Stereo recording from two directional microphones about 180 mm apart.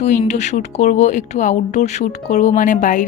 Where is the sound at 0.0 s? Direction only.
40° left (ahead or behind).